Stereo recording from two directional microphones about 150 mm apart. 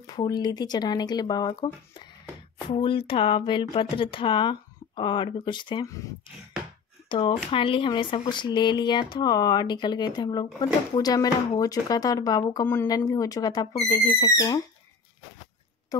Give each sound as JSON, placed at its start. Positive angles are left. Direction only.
{"t": 0.0, "sound": "speech", "side_deg": 30}
{"t": 5.9, "sound": "speech", "side_deg": 20}
{"t": 7.1, "sound": "speech", "side_deg": 35}